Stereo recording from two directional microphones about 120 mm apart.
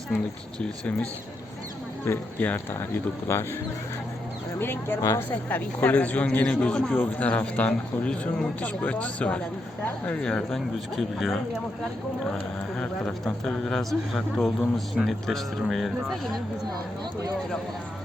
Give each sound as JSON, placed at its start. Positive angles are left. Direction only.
{"t": 0.6, "sound": "a man's voice", "side_deg": 10}
{"t": 2.0, "sound": "speech", "side_deg": 20}
{"t": 4.6, "sound": "a man's voice", "side_deg": 20}
{"t": 12.7, "sound": "speech", "side_deg": 5}